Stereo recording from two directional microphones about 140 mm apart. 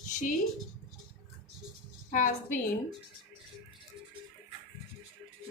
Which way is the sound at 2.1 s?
65° left (ahead or behind).